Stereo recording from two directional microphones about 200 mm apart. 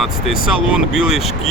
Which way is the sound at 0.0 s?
Centre (ahead or behind).